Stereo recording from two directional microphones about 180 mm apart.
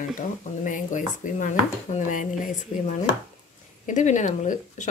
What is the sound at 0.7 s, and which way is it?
Speech, 45° left (ahead or behind).